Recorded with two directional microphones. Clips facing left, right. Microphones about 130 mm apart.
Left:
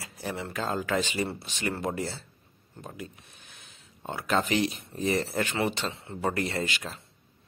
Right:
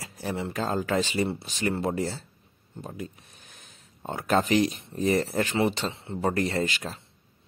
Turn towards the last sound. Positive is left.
turn(degrees=-35)  # may be behind; listen again after turning